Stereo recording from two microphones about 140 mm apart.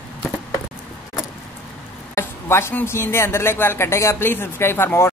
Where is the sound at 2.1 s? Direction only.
20° left (ahead or behind).